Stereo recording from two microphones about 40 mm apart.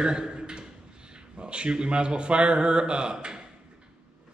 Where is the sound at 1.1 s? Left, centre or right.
Right.